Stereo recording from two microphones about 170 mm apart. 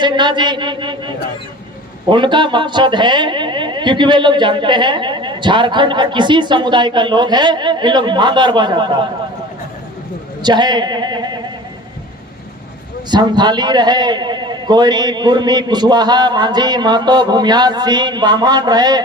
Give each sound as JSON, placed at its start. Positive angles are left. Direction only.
{"t": 0.0, "sound": "a man's voice", "side_deg": -25}
{"t": 10.4, "sound": "a man's voice", "side_deg": -25}
{"t": 13.1, "sound": "a man's voice", "side_deg": -25}